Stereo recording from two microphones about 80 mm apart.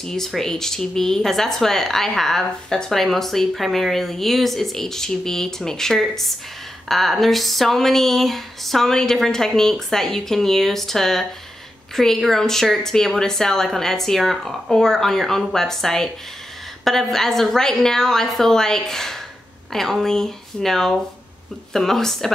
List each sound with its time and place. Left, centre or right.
0.0 s speech: centre